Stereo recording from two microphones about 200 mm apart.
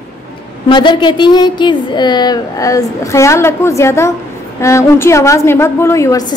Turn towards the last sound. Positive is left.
turn(degrees=15)  # may be behind; listen again after turning